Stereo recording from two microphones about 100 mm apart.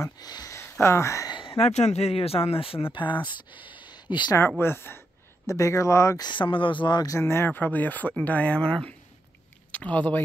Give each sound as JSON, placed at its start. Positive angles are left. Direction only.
{"t": 0.0, "sound": "speech", "side_deg": 40}
{"t": 0.6, "sound": "speech", "side_deg": 25}
{"t": 1.7, "sound": "speech", "side_deg": 90}
{"t": 4.6, "sound": "speech", "side_deg": 20}
{"t": 6.2, "sound": "speech", "side_deg": 55}
{"t": 7.1, "sound": "speech", "side_deg": 25}